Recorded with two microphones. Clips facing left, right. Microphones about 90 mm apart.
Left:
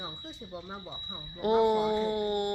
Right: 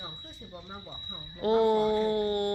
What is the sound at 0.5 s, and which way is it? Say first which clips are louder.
Speech: left 2 dB; 15° left (ahead or behind).